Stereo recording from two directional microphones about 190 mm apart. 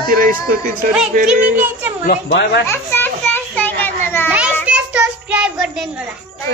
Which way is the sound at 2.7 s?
10° left (ahead or behind).